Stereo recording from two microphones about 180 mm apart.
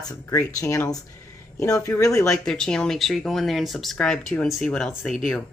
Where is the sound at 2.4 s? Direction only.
5° left (ahead or behind).